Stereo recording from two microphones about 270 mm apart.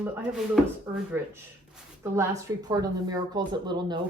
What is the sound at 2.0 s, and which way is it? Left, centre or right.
Speech, centre.